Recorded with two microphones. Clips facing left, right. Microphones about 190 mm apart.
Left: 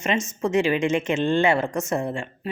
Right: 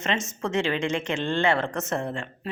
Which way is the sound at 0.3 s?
15° left (ahead or behind).